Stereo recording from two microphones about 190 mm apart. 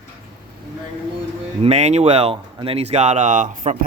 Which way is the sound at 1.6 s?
35° right (ahead or behind).